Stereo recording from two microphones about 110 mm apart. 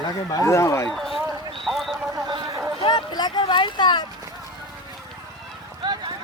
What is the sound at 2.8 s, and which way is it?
Boat, 40° left (ahead or behind).